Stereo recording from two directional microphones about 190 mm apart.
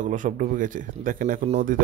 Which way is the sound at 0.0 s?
40° right (ahead or behind).